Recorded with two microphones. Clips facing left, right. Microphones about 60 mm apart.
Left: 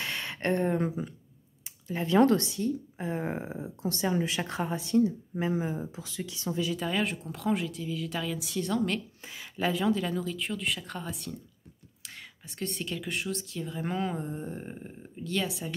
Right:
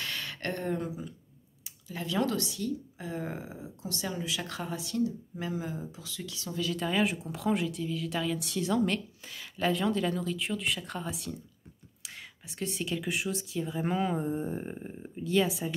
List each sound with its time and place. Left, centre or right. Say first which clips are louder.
0.0 s a sound: left 4 dB; left
2.0 s speech: left 7 dB; left; by 6.8 s centre
6.8 s speech: right 1 dB; centre
9.2 s speech: even; centre